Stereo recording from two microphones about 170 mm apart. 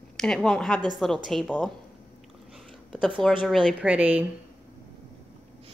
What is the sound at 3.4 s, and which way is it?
Speech, centre (ahead or behind).